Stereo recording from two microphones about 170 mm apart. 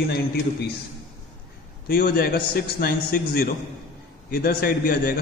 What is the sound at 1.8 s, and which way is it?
A man's voice, 65° left (ahead or behind).